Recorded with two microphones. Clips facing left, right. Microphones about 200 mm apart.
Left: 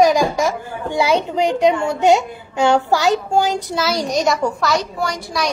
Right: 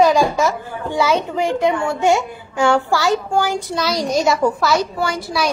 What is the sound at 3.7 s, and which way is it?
A woman's voice, centre (ahead or behind).